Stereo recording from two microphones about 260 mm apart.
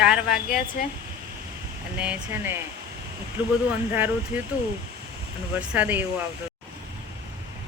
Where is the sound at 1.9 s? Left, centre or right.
Centre.